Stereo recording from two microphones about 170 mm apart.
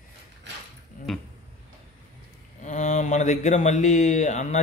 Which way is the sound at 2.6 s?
45° left (ahead or behind).